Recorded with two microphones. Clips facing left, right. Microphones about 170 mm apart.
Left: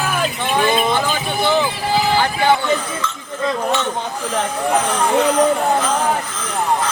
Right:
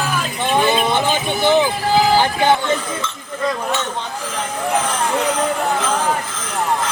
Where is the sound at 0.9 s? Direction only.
20° right (ahead or behind).